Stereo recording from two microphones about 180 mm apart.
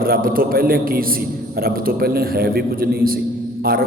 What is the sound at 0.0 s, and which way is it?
A man's voice, 55° right (ahead or behind).